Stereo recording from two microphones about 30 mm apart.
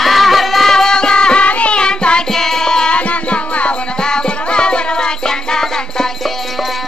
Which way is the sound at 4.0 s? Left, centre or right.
Left.